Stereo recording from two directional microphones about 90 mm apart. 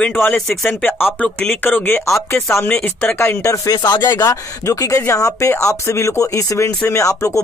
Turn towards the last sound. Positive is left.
turn(degrees=35)  # may be behind; listen again after turning